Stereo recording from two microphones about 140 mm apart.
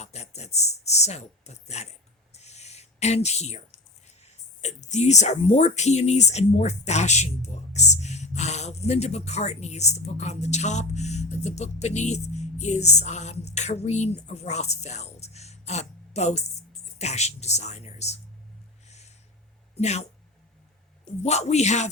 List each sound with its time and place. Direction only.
0.0 s a sound: 50° left (ahead or behind)
4.6 s speech: 55° left (ahead or behind)
19.7 s speech: 50° left (ahead or behind)
21.2 s speech: 50° left (ahead or behind)